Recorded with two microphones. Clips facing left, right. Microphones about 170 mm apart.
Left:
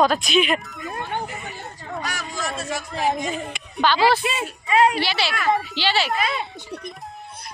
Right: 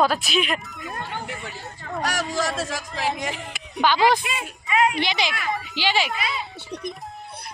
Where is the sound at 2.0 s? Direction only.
75° right (ahead or behind).